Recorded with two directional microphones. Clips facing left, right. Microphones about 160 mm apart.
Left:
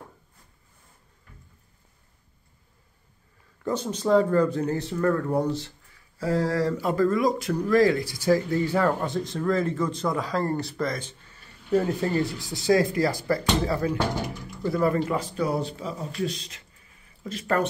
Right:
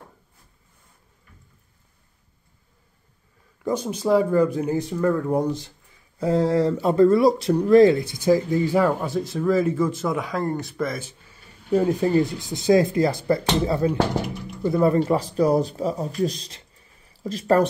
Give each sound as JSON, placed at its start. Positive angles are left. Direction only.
{"t": 3.6, "sound": "speech", "side_deg": -10}